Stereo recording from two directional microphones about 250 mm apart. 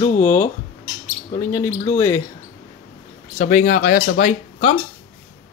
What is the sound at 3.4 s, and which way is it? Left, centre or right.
Speech, left.